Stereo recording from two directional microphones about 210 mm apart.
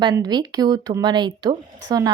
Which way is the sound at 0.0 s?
20° right (ahead or behind).